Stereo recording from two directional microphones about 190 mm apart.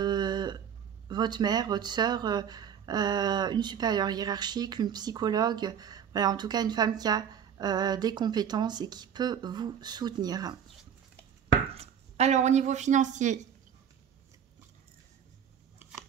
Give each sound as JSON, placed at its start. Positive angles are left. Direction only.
{"t": 0.0, "sound": "a sound", "side_deg": -20}
{"t": 1.0, "sound": "speech", "side_deg": -20}
{"t": 11.7, "sound": "speech", "side_deg": -35}
{"t": 15.8, "sound": "scissors", "side_deg": -10}